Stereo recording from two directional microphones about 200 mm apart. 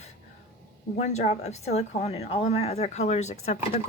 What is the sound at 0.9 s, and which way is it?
A woman's voice, 35° left (ahead or behind).